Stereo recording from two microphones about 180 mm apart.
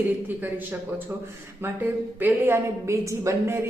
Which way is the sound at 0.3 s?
10° right (ahead or behind).